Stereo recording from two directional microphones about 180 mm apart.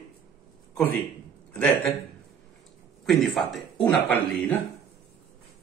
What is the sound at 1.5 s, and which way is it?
Speech, 5° left (ahead or behind).